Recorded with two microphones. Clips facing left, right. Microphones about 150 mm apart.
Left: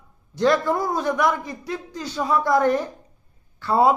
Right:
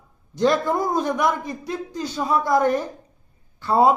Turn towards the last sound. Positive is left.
turn(degrees=-15)  # may be behind; listen again after turning